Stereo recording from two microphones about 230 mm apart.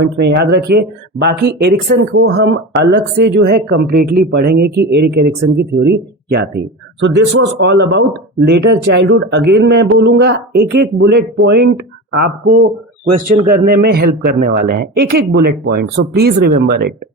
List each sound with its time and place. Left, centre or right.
0.0 s speech: right
7.6 s speech: right